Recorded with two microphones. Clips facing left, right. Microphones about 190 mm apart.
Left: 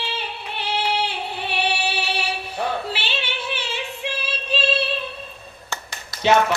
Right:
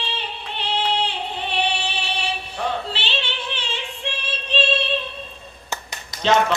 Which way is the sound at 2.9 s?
10° left (ahead or behind).